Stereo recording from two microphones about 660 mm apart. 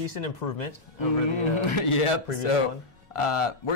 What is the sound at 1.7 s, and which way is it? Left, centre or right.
A man's voice, left.